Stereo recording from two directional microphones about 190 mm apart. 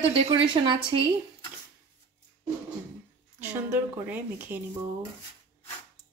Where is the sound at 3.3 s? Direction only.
10° right (ahead or behind).